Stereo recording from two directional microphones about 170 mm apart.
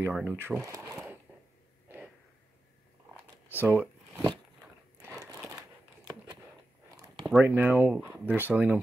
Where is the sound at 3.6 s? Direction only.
10° right (ahead or behind).